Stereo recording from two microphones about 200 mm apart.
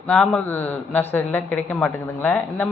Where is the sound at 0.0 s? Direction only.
5° left (ahead or behind).